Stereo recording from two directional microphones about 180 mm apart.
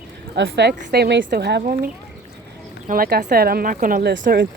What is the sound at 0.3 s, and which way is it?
Speech, 75° right (ahead or behind).